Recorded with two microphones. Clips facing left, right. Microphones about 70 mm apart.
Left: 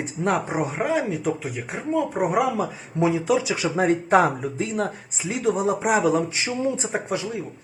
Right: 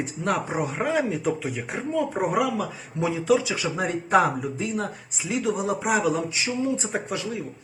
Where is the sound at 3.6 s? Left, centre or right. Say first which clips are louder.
Left 5 dB; left.